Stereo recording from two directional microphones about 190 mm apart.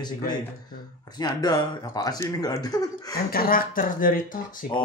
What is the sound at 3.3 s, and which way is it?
Speech, 50° left (ahead or behind).